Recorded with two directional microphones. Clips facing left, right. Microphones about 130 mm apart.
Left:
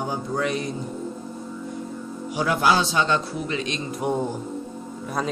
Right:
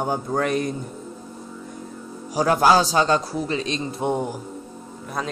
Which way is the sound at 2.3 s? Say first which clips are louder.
Right 4 dB; 40° right (ahead or behind).